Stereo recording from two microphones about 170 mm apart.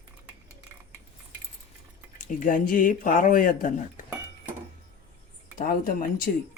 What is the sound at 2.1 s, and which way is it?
Speech, 50° left (ahead or behind).